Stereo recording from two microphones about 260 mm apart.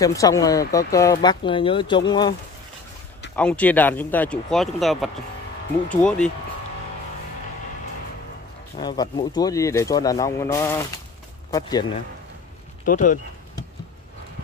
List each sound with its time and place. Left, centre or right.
0.0 s speech: centre
3.3 s speech: centre
8.7 s speech: centre
12.8 s speech: left